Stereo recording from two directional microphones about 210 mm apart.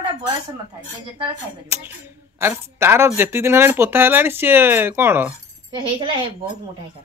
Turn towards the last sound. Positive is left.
turn(degrees=-25)  # may be behind; listen again after turning